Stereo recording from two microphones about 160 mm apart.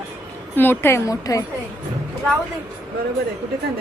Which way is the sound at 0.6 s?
15° left (ahead or behind).